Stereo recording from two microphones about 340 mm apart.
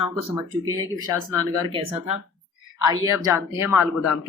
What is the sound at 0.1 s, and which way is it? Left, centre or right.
Speech, centre.